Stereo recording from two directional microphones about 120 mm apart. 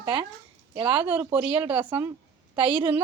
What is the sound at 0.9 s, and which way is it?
Speech, 15° right (ahead or behind).